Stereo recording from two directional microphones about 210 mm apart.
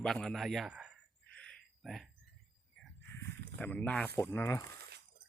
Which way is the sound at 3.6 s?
5° left (ahead or behind).